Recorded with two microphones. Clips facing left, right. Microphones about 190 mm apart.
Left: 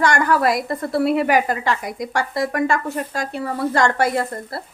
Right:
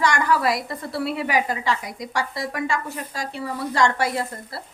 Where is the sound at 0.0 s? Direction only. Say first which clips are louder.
Left 3 dB; 50° left (ahead or behind).